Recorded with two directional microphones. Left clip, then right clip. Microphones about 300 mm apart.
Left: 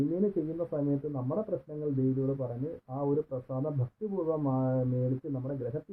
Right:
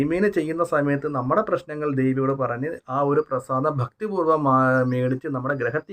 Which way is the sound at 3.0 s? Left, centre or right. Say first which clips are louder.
Right 10 dB; right.